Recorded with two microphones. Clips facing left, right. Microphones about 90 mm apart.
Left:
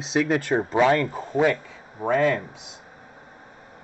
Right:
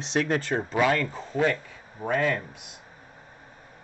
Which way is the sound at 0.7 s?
25° left (ahead or behind).